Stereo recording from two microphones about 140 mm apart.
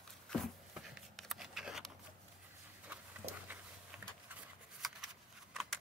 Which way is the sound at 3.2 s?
55° right (ahead or behind).